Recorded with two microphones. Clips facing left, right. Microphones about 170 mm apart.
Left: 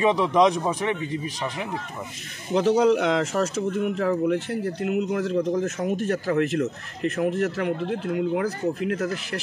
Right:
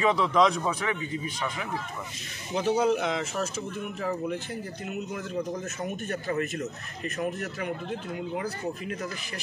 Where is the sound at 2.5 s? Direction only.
80° left.